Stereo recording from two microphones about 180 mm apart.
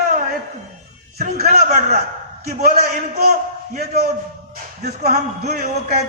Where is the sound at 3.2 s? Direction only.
60° right (ahead or behind).